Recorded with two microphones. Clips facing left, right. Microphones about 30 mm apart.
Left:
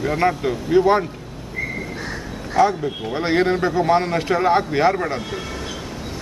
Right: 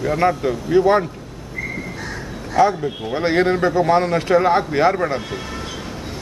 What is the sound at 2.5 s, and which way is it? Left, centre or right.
A man's voice, centre.